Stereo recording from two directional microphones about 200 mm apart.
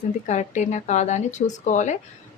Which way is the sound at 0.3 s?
35° left (ahead or behind).